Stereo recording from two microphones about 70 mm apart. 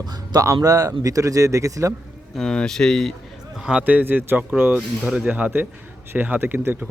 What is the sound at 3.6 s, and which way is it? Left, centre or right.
Speech, centre.